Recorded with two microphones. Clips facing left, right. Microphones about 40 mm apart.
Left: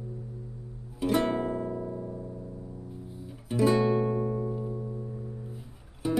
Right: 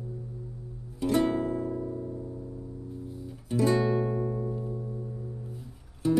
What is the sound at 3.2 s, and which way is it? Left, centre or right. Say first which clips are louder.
Music: left 1 dB; centre.